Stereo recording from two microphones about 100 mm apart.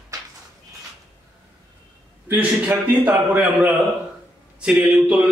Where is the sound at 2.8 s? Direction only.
15° right (ahead or behind).